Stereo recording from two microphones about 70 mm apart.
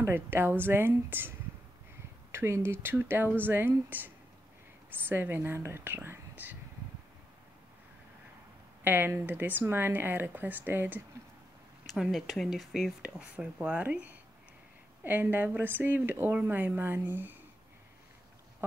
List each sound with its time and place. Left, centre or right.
0.0 s speech: right
2.3 s speech: right
8.8 s speech: right
12.0 s speech: centre
13.0 s speech: centre